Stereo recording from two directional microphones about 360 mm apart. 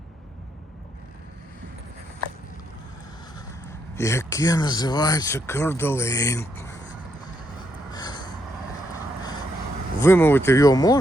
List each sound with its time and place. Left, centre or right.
3.9 s speech: centre
7.9 s a sound: centre
10.0 s speech: centre